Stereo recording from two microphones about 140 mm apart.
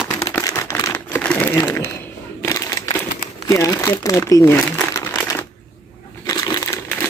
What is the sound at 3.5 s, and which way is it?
Speech, 25° left (ahead or behind).